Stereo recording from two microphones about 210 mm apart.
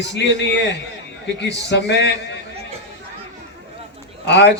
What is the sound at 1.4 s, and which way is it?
A man's voice, 55° left (ahead or behind).